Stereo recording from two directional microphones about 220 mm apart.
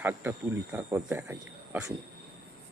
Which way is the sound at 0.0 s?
10° right (ahead or behind).